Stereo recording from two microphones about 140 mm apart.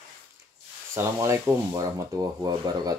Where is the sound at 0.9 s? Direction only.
20° right (ahead or behind).